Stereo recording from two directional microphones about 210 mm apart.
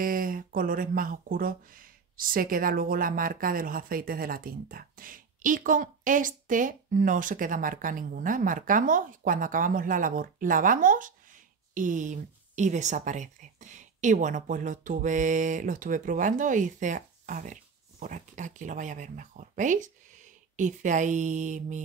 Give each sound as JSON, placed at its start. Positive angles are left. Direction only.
{"t": 0.0, "sound": "speech", "side_deg": -40}